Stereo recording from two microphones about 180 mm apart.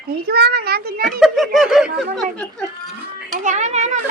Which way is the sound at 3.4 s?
40° right (ahead or behind).